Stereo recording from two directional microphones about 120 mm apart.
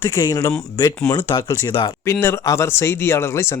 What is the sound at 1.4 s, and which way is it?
Speech, 25° left (ahead or behind).